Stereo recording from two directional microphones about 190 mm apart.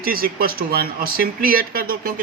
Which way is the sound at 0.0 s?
50° right (ahead or behind).